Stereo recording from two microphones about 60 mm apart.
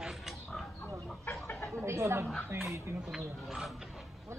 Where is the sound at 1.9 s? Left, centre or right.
Right.